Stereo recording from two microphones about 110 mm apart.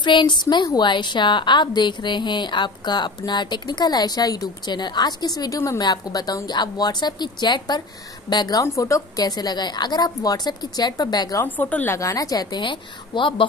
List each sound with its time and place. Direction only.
0.0 s a woman's voice: 45° left (ahead or behind)
8.6 s a woman's voice: 30° left (ahead or behind)
11.4 s speech: 15° left (ahead or behind)
12.0 s a woman's voice: 30° left (ahead or behind); by 13.5 s 50° left (ahead or behind)